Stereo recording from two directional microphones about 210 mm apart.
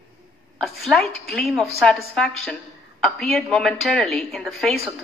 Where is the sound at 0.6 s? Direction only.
Centre (ahead or behind).